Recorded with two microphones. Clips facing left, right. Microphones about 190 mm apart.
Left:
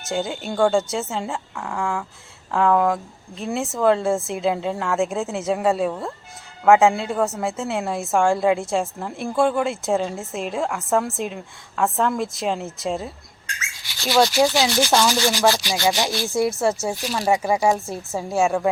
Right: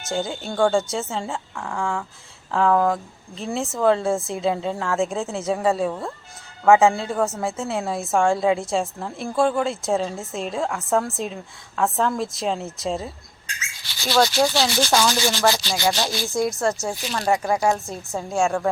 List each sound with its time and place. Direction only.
0.0 s a woman's voice: centre (ahead or behind)
15.2 s rub: 15° left (ahead or behind)
16.1 s a woman's voice: centre (ahead or behind)